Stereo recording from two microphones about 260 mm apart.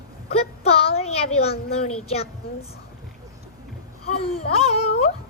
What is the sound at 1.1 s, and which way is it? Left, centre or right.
Child singing, left.